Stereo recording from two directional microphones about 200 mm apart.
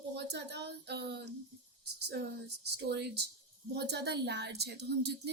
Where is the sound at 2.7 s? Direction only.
55° right (ahead or behind).